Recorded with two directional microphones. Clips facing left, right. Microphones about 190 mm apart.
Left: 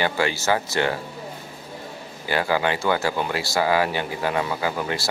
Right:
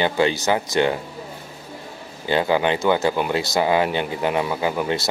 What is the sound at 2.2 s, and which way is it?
Speech, 20° right (ahead or behind).